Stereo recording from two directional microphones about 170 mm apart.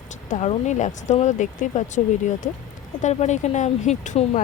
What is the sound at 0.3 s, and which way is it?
Speech, 45° left (ahead or behind).